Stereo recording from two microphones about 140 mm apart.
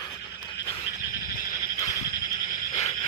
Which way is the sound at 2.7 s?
50° left (ahead or behind).